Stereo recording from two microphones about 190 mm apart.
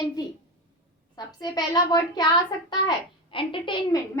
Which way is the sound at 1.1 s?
20° left (ahead or behind).